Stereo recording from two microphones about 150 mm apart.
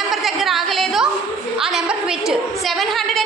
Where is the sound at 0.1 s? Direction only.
Centre (ahead or behind).